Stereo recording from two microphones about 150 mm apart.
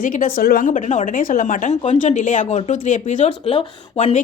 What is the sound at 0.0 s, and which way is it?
A woman's voice, 65° left (ahead or behind).